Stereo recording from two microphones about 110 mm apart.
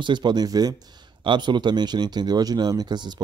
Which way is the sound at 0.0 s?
45° right (ahead or behind).